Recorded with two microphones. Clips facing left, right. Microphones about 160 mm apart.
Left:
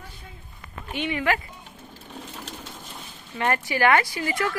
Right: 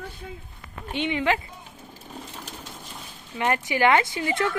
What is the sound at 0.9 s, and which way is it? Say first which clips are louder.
Speech: right 1 dB; 20° right (ahead or behind).